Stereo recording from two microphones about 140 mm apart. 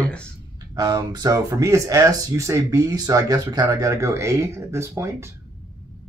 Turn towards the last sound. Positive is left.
turn(degrees=-20)  # may be behind; listen again after turning